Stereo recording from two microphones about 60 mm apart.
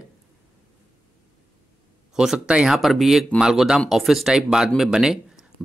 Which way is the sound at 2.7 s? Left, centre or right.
Centre.